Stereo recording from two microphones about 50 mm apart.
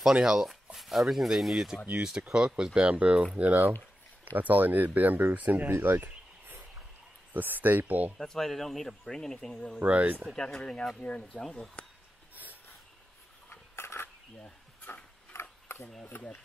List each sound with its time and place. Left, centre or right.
0.1 s speech: centre; by 5.7 s right
5.8 s speech: right
7.3 s speech: right
8.2 s speech: centre
9.8 s speech: right
10.3 s speech: centre
13.5 s a sound: left
15.3 s a sound: left